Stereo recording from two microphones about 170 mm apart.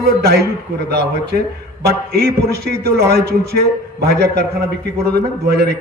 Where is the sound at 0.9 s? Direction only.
70° right (ahead or behind).